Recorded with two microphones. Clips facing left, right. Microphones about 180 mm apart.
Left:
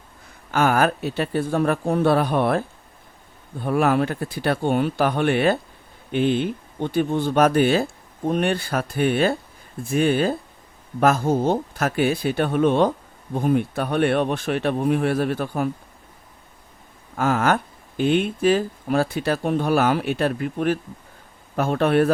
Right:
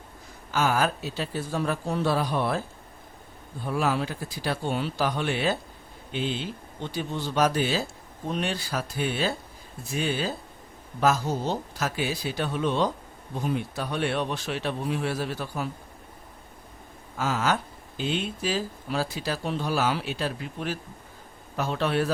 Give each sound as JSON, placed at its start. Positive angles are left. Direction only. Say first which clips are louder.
{"t": 0.5, "sound": "speech", "louder": "left 6 dB", "side_deg": 60}
{"t": 17.2, "sound": "a man's voice", "louder": "left 6 dB", "side_deg": 55}